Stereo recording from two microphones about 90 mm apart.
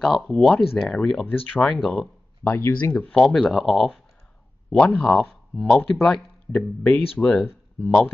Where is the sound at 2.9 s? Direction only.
10° left (ahead or behind).